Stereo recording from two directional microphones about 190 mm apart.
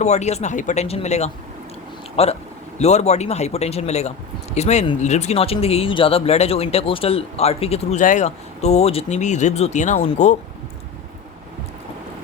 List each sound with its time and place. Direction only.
0.0 s speech: 35° left (ahead or behind)